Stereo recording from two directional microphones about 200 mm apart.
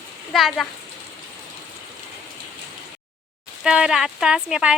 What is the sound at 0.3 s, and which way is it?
Speech, centre (ahead or behind).